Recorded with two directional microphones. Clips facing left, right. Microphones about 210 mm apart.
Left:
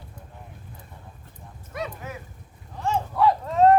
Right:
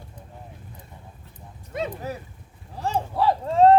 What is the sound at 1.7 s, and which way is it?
Speech, 25° right (ahead or behind).